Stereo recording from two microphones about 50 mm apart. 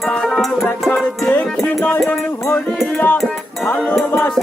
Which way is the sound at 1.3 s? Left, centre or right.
Left.